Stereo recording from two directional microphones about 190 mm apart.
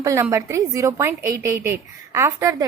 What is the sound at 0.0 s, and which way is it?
A woman's voice, 15° right (ahead or behind).